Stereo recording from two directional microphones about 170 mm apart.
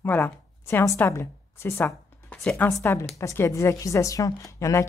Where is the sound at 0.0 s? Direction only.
10° left (ahead or behind).